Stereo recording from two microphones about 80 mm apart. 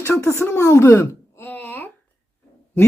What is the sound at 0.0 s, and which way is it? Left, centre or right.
Speech, left.